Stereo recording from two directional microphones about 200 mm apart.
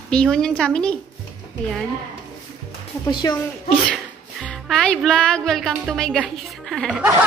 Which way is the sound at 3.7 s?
5° left (ahead or behind).